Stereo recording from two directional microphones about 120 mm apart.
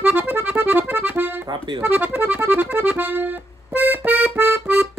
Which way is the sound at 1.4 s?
40° right (ahead or behind).